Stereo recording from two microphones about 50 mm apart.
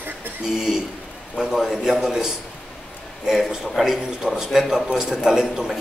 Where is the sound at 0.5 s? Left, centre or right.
Centre.